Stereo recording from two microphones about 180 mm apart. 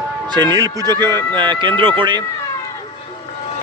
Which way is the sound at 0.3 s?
25° right (ahead or behind).